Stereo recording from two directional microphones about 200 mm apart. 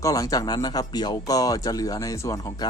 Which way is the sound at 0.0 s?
15° left (ahead or behind).